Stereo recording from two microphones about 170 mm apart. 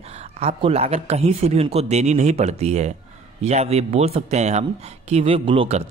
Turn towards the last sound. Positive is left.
turn(degrees=-35)  # may be behind; listen again after turning